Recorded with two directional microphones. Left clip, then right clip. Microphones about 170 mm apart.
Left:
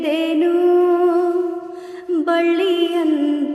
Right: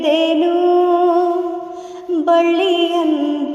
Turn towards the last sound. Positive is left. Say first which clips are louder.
# right 2 dB
turn(degrees=10)  # may be behind; listen again after turning